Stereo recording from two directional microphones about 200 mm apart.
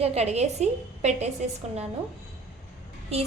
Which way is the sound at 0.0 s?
30° right (ahead or behind).